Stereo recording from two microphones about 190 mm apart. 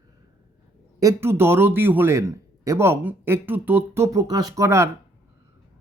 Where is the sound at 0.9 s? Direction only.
15° right (ahead or behind).